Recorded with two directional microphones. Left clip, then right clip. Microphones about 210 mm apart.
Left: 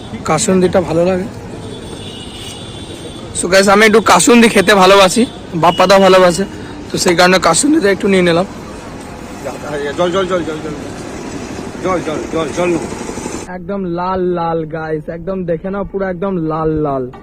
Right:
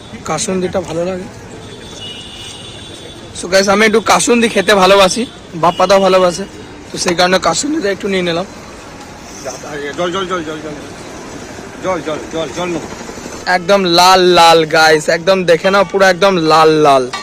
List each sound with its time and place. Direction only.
0.3 s speech: centre (ahead or behind)
3.4 s speech: centre (ahead or behind)
9.7 s speech: 45° right (ahead or behind)
11.8 s speech: 50° right (ahead or behind)
13.5 s speech: 10° right (ahead or behind)